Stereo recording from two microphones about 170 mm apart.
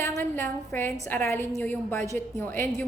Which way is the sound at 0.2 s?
15° left (ahead or behind).